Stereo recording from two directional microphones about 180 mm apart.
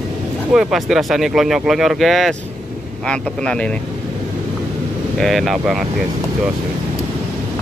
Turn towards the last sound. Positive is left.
turn(degrees=0)  # may be behind; listen again after turning